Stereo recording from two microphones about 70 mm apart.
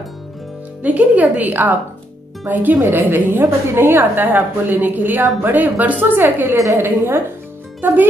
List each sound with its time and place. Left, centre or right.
0.8 s a woman's voice: right